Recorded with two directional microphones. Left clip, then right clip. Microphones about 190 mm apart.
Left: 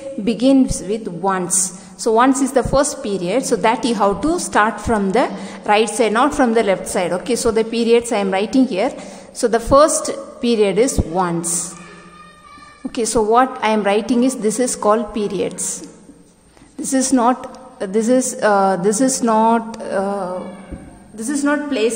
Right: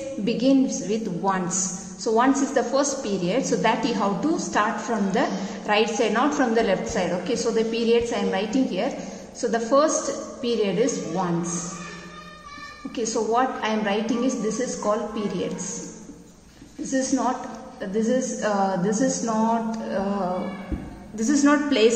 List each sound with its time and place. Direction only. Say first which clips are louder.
0.2 s a woman's voice: left 6 dB; 35° left (ahead or behind)
12.9 s a woman's voice: left 8 dB; 40° left (ahead or behind)
16.9 s a woman's voice: left 8 dB; 40° left (ahead or behind)
21.2 s a woman's voice: left 1 dB; 15° left (ahead or behind)